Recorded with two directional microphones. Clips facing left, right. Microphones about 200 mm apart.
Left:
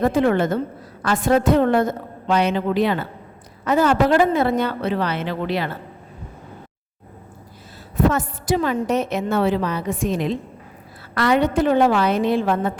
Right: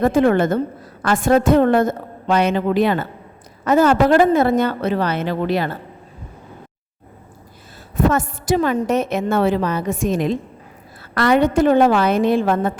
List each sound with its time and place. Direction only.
0.0 s a woman's voice: 50° right (ahead or behind)
7.9 s a woman's voice: 50° right (ahead or behind)